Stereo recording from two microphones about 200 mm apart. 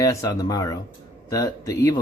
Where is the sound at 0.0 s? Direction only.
15° left (ahead or behind).